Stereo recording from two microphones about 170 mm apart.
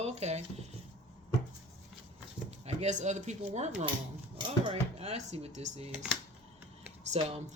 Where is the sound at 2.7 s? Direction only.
40° right (ahead or behind).